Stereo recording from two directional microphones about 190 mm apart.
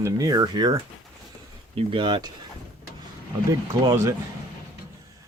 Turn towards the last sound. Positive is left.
turn(degrees=-15)  # may be behind; listen again after turning